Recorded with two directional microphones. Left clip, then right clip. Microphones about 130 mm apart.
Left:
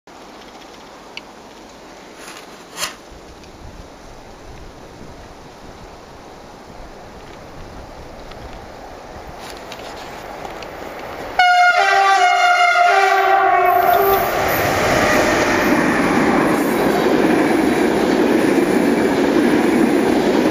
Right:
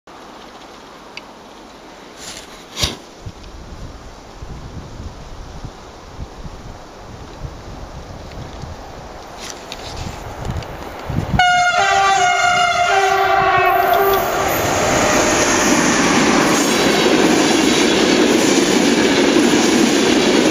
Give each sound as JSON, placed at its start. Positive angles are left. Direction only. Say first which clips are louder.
{"t": 11.3, "sound": "train", "louder": "left 1 dB", "side_deg": 5}
{"t": 13.8, "sound": "vehicle", "louder": "even", "side_deg": 5}
{"t": 16.0, "sound": "train", "louder": "right 2 dB", "side_deg": -35}
{"t": 17.3, "sound": "train", "louder": "right 1 dB", "side_deg": -30}
{"t": 18.3, "sound": "train", "louder": "right 1 dB", "side_deg": -25}
{"t": 19.5, "sound": "vehicle", "louder": "right 1 dB", "side_deg": -35}